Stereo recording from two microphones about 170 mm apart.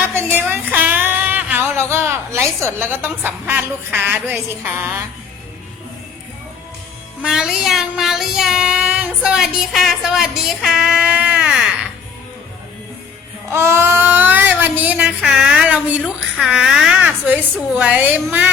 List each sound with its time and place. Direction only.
0.1 s speech: 15° right (ahead or behind)
7.2 s child singing: 5° right (ahead or behind)
13.5 s speech: 15° right (ahead or behind)